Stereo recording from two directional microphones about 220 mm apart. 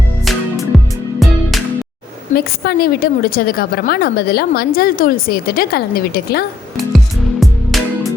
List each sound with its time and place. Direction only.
0.3 s music: centre (ahead or behind)
2.3 s a woman's voice: 45° left (ahead or behind)
6.7 s music: centre (ahead or behind)